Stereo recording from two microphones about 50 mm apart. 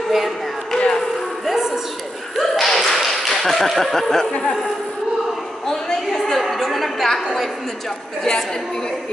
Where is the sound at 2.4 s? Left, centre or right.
Centre.